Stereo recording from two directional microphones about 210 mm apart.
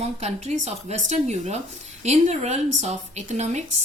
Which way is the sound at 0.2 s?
30° right (ahead or behind).